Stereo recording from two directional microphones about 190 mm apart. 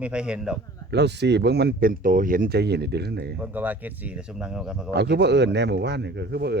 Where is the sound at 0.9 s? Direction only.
60° right (ahead or behind).